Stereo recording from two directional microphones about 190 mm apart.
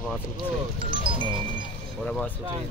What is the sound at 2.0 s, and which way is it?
Speech, 5° left (ahead or behind).